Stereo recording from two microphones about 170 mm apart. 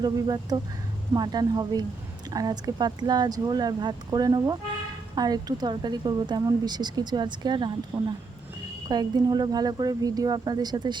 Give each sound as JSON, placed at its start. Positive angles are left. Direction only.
{"t": 0.0, "sound": "speech", "side_deg": -20}